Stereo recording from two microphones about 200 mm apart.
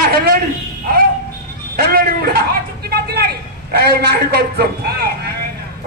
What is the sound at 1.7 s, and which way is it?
Speech, 50° right (ahead or behind).